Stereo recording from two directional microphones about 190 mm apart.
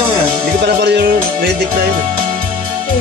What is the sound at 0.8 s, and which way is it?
Music, 60° right (ahead or behind).